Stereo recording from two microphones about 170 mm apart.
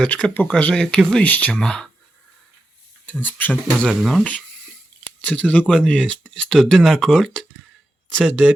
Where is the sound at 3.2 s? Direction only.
10° left (ahead or behind).